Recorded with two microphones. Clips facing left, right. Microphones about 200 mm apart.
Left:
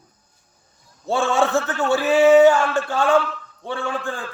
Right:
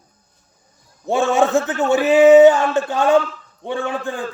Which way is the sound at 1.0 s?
15° right (ahead or behind).